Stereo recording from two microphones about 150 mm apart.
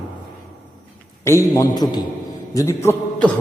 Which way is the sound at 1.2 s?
20° left (ahead or behind).